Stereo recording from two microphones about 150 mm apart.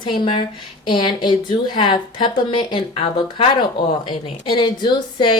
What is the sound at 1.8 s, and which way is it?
Speech, 30° left (ahead or behind).